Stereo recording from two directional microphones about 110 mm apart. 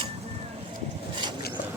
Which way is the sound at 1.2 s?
45° right (ahead or behind).